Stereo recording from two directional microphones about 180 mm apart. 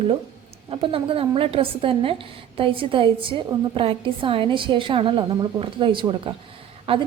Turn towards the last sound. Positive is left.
turn(degrees=-30)  # may be behind; listen again after turning